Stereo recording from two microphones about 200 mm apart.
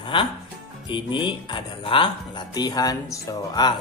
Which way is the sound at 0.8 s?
25° left (ahead or behind).